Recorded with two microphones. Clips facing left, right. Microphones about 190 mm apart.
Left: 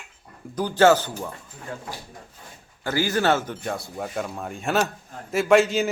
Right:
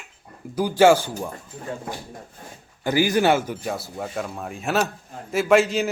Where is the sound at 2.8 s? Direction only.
15° right (ahead or behind).